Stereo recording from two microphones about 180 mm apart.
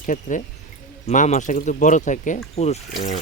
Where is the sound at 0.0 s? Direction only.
45° left (ahead or behind).